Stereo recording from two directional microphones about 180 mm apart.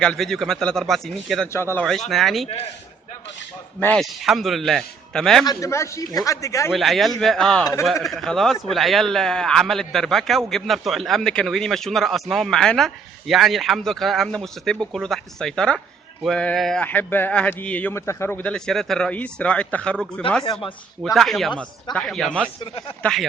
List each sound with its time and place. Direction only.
0.0 s a man's voice: 5° left (ahead or behind)
1.5 s speech: 15° left (ahead or behind)
1.8 s a man's voice: centre (ahead or behind)
3.8 s a man's voice: 5° left (ahead or behind)
5.5 s speech: 15° left (ahead or behind)
6.7 s a man's voice: centre (ahead or behind)
22.6 s speech: 30° left (ahead or behind)